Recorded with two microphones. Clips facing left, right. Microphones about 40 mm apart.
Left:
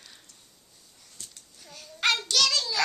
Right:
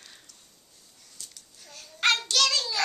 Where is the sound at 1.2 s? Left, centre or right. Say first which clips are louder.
Even; left.